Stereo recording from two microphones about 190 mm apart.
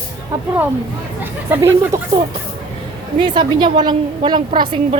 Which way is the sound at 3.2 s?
25° right (ahead or behind).